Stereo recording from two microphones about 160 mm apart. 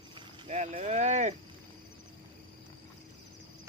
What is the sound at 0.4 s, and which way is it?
Speech, 45° right (ahead or behind).